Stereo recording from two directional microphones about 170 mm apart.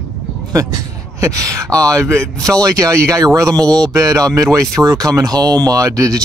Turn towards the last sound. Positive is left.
turn(degrees=-20)  # may be behind; listen again after turning